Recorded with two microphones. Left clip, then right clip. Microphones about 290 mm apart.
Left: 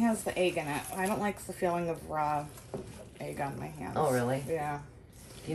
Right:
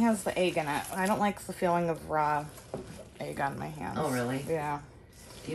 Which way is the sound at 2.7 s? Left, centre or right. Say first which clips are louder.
Right 1 dB; centre.